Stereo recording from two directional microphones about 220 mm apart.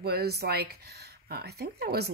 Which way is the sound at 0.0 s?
45° right (ahead or behind).